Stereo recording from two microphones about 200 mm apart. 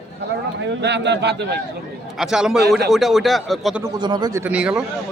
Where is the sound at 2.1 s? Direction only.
Centre (ahead or behind).